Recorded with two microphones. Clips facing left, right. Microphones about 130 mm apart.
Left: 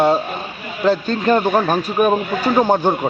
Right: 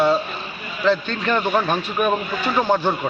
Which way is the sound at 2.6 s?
15° left (ahead or behind).